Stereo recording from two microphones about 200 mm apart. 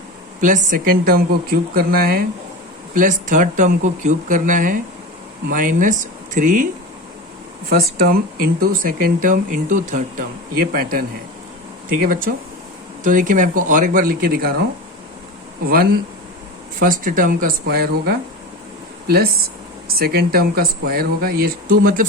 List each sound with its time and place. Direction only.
0.4 s speech: 40° right (ahead or behind)
7.7 s speech: 45° right (ahead or behind)
12.0 s speech: 45° right (ahead or behind)
15.6 s speech: 45° right (ahead or behind)